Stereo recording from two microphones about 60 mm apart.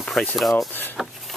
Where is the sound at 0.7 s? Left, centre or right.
Left.